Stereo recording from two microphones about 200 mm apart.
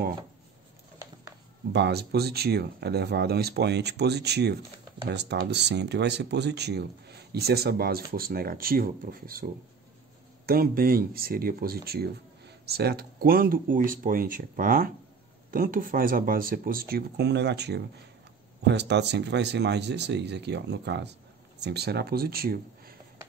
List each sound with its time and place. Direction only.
1.7 s speech: 55° right (ahead or behind)